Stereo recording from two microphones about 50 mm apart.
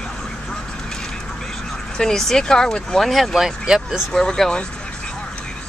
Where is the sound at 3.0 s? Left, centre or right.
Centre.